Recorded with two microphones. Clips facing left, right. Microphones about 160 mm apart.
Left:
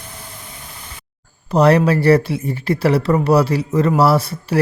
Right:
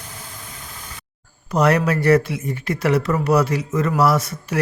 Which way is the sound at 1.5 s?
30° left (ahead or behind).